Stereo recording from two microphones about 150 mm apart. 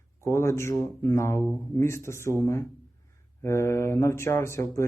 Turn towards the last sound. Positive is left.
turn(degrees=20)  # may be behind; listen again after turning